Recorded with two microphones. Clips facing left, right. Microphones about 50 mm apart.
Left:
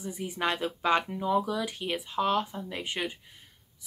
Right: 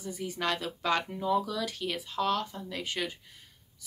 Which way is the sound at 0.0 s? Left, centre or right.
Left.